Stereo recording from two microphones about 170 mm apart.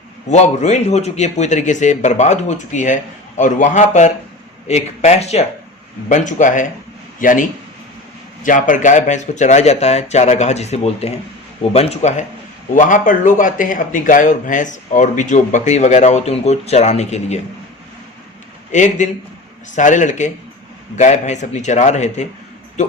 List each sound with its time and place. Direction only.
0.3 s a man's voice: 45° left (ahead or behind)
8.4 s a man's voice: 50° left (ahead or behind)
12.7 s a man's voice: 50° left (ahead or behind)
18.7 s a man's voice: 45° left (ahead or behind)